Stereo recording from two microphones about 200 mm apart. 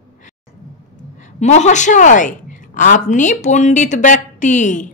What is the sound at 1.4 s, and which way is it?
A woman's voice, 35° left (ahead or behind).